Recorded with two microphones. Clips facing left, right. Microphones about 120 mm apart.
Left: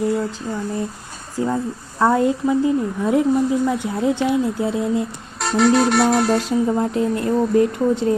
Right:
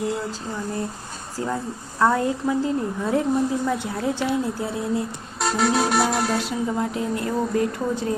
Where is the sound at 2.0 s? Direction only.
20° left (ahead or behind).